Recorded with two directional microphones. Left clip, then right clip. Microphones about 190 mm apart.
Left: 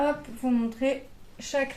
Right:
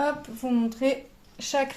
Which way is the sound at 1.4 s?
35° right (ahead or behind).